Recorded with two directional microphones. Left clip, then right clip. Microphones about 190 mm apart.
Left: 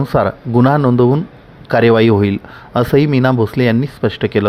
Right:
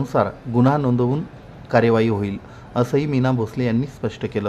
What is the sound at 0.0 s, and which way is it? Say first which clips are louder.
Speech: left 5 dB; 30° left (ahead or behind).